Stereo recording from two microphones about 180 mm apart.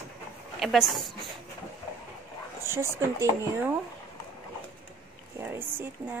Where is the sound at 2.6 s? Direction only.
15° right (ahead or behind).